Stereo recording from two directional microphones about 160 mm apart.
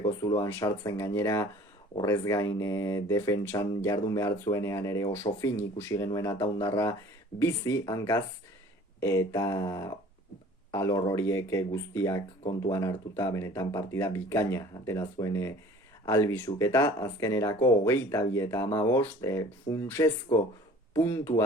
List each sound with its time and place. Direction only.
0.2 s speech: 20° left (ahead or behind)